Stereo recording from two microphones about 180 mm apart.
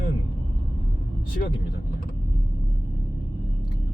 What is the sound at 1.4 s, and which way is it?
Speech, 55° left (ahead or behind).